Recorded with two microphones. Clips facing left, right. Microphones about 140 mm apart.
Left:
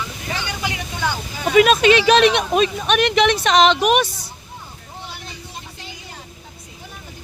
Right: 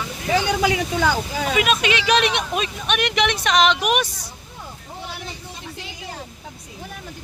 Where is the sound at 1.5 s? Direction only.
40° left (ahead or behind).